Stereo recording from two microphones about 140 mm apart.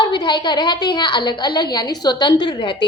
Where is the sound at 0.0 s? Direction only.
35° left (ahead or behind).